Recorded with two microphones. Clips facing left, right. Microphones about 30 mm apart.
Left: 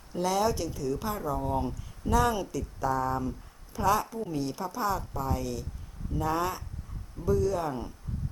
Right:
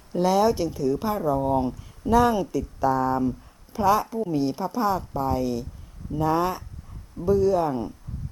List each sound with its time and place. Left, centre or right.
0.2 s a woman's voice: right